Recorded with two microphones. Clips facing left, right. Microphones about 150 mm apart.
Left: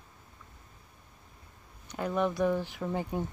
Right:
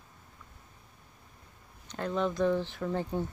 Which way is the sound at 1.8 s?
10° left (ahead or behind).